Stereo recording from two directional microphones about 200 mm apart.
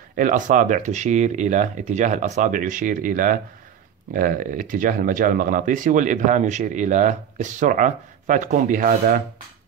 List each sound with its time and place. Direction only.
0.1 s speech: 40° right (ahead or behind)